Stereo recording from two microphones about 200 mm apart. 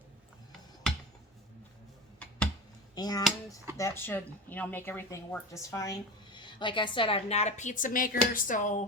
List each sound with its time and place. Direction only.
2.9 s speech: 20° left (ahead or behind); by 8.8 s 40° left (ahead or behind)